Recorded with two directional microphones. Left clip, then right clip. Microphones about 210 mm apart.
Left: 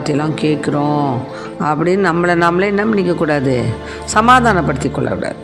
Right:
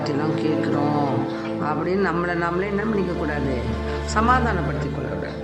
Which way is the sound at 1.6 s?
35° left (ahead or behind).